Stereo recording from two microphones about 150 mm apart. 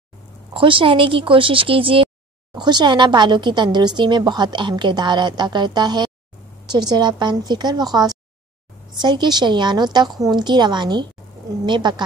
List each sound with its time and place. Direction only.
0.5 s speech: 35° right (ahead or behind)